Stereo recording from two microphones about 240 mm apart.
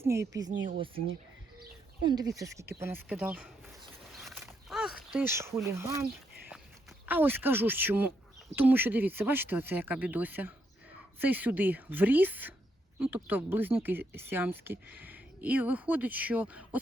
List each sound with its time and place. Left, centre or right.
0.0 s speech: centre
2.0 s speech: centre
2.4 s a sound: centre
5.6 s speech: centre
7.0 s speech: centre